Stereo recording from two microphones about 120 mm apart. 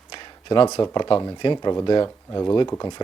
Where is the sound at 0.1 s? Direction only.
45° left (ahead or behind).